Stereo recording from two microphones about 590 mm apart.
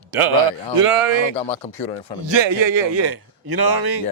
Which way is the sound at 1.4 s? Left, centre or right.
Centre.